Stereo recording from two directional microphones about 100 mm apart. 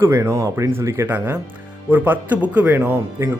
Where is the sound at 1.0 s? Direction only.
15° right (ahead or behind).